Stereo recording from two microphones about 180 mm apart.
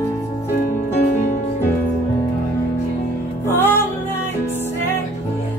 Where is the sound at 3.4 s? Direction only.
10° left (ahead or behind).